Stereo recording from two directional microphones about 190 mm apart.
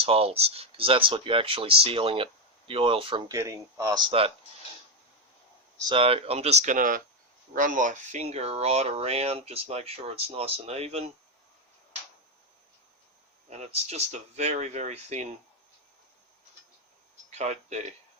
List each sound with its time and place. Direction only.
0.0 s speech: 30° right (ahead or behind)
3.3 s speech: 15° right (ahead or behind)
5.9 s speech: 30° right (ahead or behind)
13.7 s speech: 35° right (ahead or behind)
17.3 s speech: 35° right (ahead or behind)